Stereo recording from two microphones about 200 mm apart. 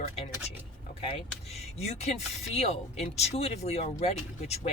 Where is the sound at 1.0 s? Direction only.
30° left (ahead or behind).